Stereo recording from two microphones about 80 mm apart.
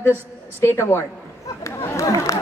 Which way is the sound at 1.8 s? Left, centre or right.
Left.